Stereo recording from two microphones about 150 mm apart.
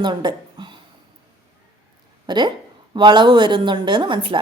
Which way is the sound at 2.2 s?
30° right (ahead or behind).